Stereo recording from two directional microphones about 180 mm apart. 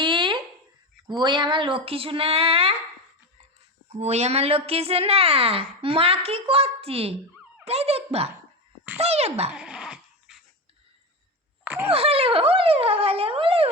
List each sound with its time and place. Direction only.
0.0 s a sound: 25° right (ahead or behind)
1.0 s a woman's voice: 25° right (ahead or behind)
3.8 s a woman's voice: 35° right (ahead or behind)
9.5 s dog: 5° right (ahead or behind)
11.6 s wail: 10° right (ahead or behind)
11.9 s a woman's voice: 35° right (ahead or behind)